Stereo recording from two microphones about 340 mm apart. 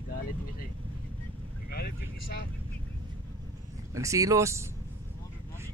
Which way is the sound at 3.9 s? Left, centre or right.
Centre.